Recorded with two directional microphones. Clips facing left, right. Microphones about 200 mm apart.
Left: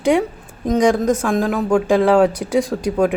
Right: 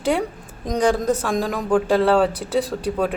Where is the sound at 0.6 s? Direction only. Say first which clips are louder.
Left 4 dB; 5° left (ahead or behind).